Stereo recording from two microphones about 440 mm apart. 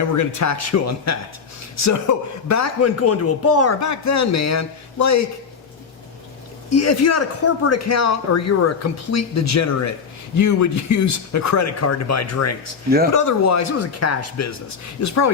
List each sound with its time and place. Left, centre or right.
0.0 s a man's voice: left
6.7 s a man's voice: left